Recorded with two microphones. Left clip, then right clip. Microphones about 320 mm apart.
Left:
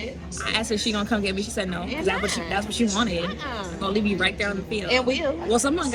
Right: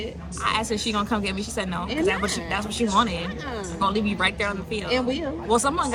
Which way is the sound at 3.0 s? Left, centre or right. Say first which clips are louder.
Right 2 dB; centre.